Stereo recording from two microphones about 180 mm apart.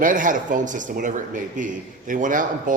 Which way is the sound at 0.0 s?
45° right (ahead or behind).